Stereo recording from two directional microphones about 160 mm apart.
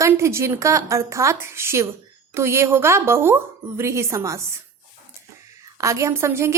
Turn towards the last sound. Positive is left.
turn(degrees=-15)  # may be behind; listen again after turning